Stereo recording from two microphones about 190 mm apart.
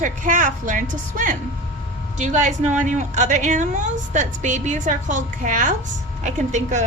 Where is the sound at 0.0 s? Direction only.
45° right (ahead or behind).